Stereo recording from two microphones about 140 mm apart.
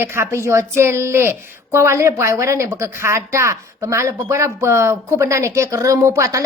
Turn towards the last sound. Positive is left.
turn(degrees=-20)  # may be behind; listen again after turning